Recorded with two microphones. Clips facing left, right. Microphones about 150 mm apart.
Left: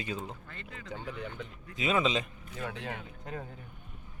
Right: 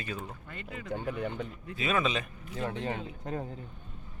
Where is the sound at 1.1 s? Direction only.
55° right (ahead or behind).